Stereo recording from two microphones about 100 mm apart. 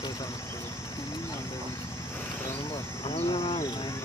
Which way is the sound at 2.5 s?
65° left (ahead or behind).